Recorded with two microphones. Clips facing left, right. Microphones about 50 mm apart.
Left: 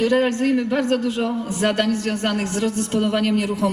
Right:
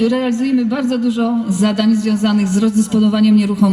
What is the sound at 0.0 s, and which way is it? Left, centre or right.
A man's voice, left.